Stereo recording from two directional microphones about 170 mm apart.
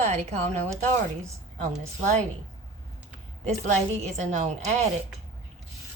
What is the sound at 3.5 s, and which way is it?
A woman's voice, 45° right (ahead or behind).